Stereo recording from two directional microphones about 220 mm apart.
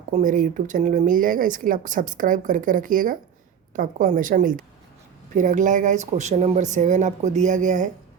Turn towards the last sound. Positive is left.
turn(degrees=-35)  # may be behind; listen again after turning